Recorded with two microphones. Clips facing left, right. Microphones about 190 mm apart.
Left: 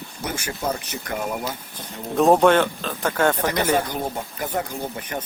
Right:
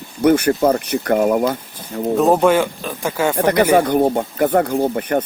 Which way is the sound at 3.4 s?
60° right (ahead or behind).